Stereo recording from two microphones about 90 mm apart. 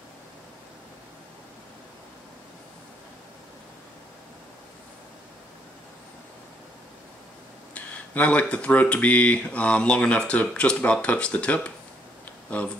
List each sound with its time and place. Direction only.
7.7 s speech: 15° left (ahead or behind)